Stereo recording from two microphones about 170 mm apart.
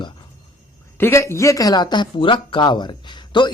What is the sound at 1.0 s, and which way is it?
A man's voice, 15° left (ahead or behind).